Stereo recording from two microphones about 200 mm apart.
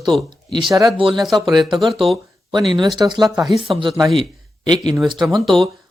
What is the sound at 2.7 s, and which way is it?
Speech, 25° right (ahead or behind).